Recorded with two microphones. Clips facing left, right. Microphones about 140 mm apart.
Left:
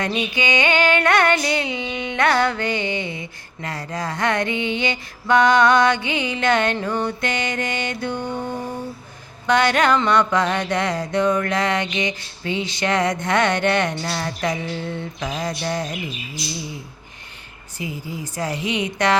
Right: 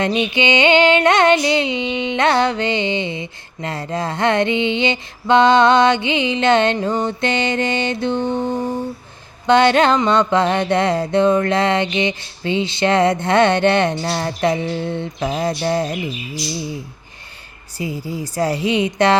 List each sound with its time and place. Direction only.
0.0 s music: 25° right (ahead or behind)
17.7 s a woman's voice: 35° right (ahead or behind)